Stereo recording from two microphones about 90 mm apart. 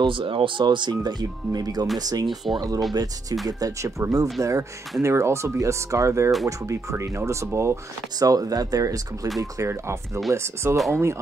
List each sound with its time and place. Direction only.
0.0 s speech: 75° right (ahead or behind); by 2.2 s 45° right (ahead or behind)
2.2 s speech: centre (ahead or behind)
2.9 s speech: 45° right (ahead or behind); by 11.1 s 30° right (ahead or behind)